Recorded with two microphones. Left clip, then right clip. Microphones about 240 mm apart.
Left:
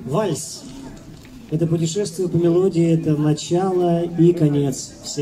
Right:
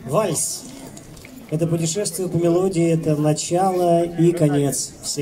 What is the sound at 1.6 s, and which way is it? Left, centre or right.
A man's voice, right.